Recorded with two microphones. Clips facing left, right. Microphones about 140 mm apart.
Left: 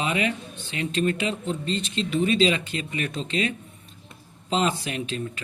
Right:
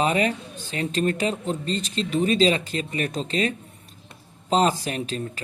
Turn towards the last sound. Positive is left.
turn(degrees=-40)  # may be behind; listen again after turning